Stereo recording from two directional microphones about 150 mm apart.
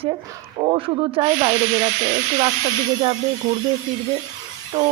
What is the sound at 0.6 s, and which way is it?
Speech, 35° right (ahead or behind).